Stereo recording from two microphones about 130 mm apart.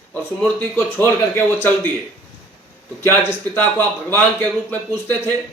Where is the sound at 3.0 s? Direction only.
15° left (ahead or behind).